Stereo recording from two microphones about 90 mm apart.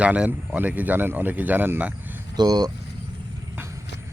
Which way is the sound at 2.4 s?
50° right (ahead or behind).